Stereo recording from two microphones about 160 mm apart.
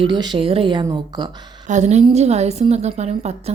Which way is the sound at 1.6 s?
45° right (ahead or behind).